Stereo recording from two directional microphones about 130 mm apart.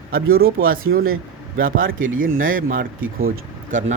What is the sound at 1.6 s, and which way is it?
Speech, 90° right.